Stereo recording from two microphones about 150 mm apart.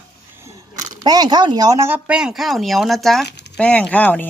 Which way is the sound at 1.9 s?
5° right (ahead or behind).